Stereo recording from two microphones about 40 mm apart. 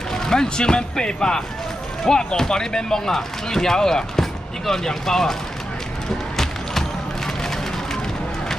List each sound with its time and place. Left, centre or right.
0.1 s speech: centre
6.3 s music: centre